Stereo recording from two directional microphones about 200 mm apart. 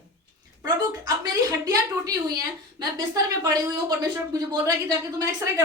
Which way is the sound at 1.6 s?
20° right (ahead or behind).